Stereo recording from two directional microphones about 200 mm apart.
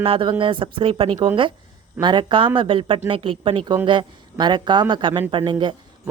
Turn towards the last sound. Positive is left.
turn(degrees=-25)  # may be behind; listen again after turning